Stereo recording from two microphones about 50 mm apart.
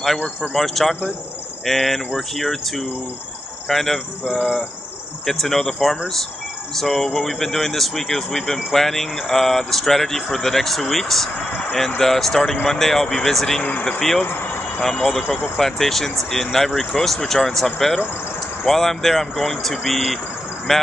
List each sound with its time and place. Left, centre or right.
0.6 s speech: centre
4.2 s a sound: centre
5.2 s speech: centre
13.6 s speech: left
13.9 s speech: centre
14.2 s speech: left
14.8 s speech: centre
15.2 s a sound: centre
15.5 s speech: centre